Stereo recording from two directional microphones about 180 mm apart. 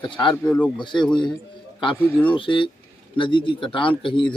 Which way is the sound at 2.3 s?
30° left (ahead or behind).